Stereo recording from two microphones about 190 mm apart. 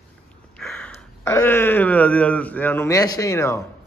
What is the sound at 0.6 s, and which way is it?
Sniff, 5° left (ahead or behind).